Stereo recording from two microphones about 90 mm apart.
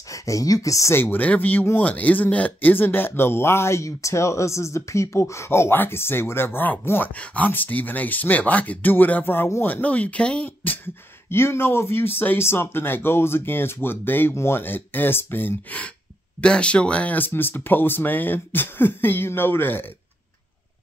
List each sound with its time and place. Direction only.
0.1 s speech: 35° left (ahead or behind)
1.0 s speech: 20° left (ahead or behind)